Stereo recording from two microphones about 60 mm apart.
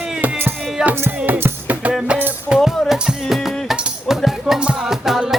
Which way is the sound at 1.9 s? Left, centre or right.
Centre.